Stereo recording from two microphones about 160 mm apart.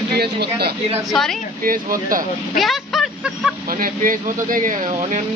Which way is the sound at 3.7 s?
60° right (ahead or behind).